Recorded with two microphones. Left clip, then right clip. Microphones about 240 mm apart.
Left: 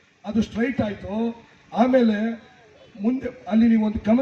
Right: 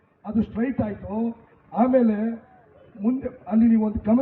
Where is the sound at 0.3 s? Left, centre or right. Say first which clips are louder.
Left 2 dB; left.